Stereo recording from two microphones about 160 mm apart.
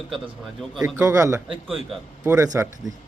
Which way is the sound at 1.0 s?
20° right (ahead or behind).